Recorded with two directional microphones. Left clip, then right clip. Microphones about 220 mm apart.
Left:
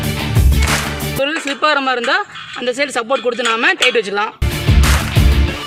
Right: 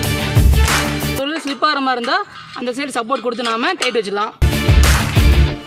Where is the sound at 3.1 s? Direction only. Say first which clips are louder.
Left 2 dB; 35° right (ahead or behind).